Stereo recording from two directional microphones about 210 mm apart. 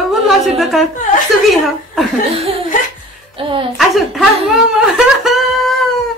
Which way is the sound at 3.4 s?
25° right (ahead or behind).